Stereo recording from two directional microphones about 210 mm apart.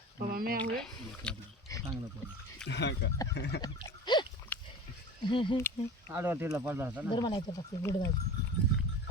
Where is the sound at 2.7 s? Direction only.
55° left (ahead or behind).